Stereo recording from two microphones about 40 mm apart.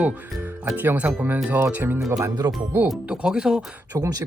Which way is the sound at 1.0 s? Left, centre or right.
Right.